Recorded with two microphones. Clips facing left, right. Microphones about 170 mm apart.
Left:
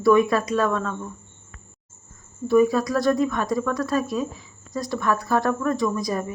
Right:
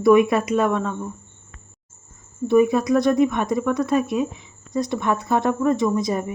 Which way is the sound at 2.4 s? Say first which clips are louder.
Right 2 dB; 20° right (ahead or behind).